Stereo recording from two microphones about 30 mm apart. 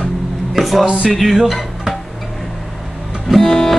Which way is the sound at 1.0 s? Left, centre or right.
Centre.